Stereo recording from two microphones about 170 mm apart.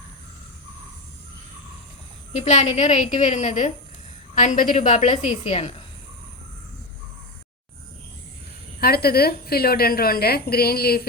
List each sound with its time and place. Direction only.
2.3 s a woman's voice: 40° left (ahead or behind)
8.8 s a woman's voice: 65° left (ahead or behind)